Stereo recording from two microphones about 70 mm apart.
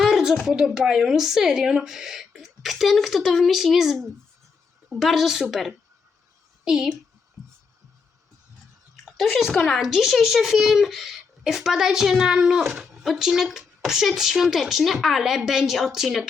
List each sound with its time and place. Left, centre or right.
0.0 s a sound: centre
0.4 s a child's voice: centre
9.0 s bathtub: centre
9.5 s speech: centre